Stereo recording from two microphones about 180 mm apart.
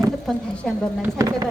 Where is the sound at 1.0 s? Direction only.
15° right (ahead or behind).